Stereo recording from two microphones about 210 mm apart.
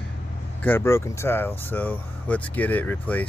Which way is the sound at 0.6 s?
10° left (ahead or behind).